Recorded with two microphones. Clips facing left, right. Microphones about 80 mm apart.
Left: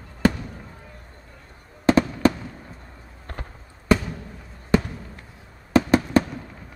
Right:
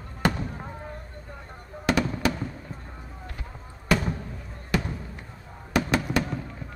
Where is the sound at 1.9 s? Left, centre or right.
Left.